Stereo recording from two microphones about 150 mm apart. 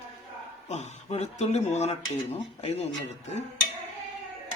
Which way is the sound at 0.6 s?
50° left (ahead or behind).